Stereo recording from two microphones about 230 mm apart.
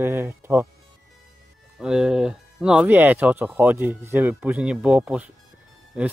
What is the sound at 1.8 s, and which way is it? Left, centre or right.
Speech, centre.